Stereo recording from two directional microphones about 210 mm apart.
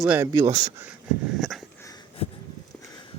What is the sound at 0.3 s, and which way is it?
Speech, 15° right (ahead or behind).